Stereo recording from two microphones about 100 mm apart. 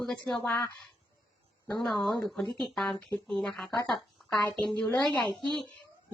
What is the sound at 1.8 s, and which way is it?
Speech, 5° left (ahead or behind).